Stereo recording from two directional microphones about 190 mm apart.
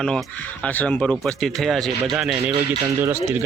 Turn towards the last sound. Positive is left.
turn(degrees=-15)  # may be behind; listen again after turning